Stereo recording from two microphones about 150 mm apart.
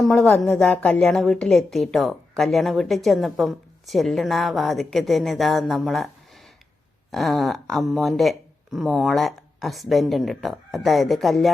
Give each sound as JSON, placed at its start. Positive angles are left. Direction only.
{"t": 0.0, "sound": "a woman's voice", "side_deg": 5}